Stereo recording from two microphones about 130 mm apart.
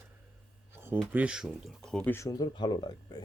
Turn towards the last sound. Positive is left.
turn(degrees=35)  # may be behind; listen again after turning